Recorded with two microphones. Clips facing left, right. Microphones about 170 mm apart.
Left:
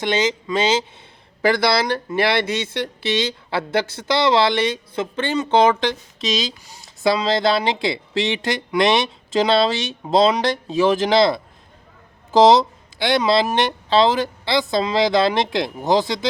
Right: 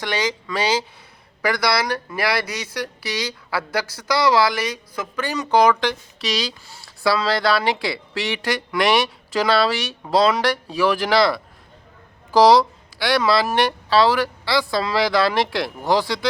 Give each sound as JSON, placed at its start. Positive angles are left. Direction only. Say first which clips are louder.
{"t": 0.0, "sound": "speech", "louder": "left 4 dB", "side_deg": 20}